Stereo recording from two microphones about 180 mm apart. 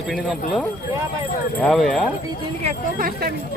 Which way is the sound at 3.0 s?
55° right (ahead or behind).